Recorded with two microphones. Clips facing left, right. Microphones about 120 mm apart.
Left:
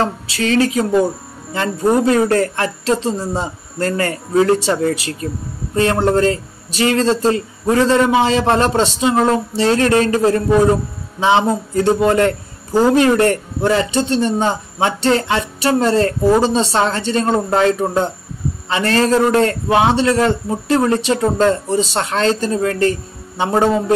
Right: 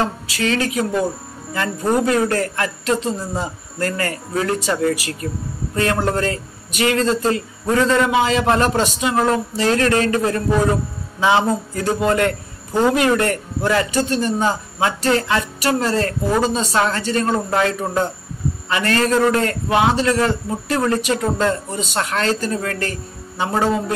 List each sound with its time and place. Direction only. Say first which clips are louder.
0.0 s speech: left 2 dB; 30° left (ahead or behind)
2.0 s speech: left 4 dB; 30° left (ahead or behind)